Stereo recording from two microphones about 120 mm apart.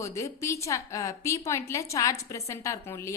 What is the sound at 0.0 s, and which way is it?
A woman's voice, 25° left (ahead or behind).